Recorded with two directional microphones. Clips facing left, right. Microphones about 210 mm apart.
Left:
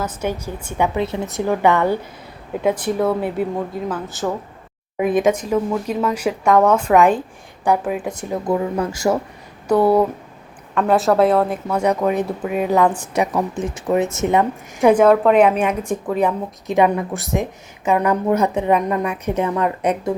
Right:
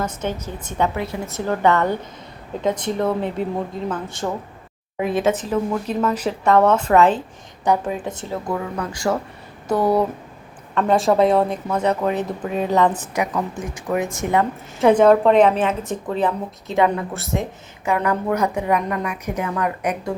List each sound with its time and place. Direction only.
0.0 s a woman's voice: 10° left (ahead or behind)
0.9 s a woman's voice: 25° left (ahead or behind)
8.2 s a woman's voice: 20° left (ahead or behind)
9.7 s a woman's voice: 10° left (ahead or behind)
13.6 s a woman's voice: 25° left (ahead or behind)